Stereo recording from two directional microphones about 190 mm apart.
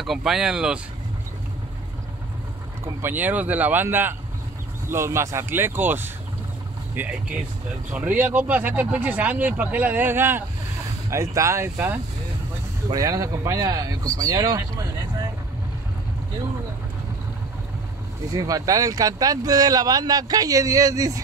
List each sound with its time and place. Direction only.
0.0 s speech: centre (ahead or behind)
2.8 s speech: 10° right (ahead or behind)
8.2 s speech: 10° right (ahead or behind)
18.3 s speech: 20° right (ahead or behind)